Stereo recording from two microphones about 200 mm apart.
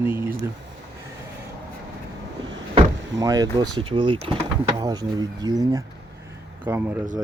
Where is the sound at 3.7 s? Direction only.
25° right (ahead or behind).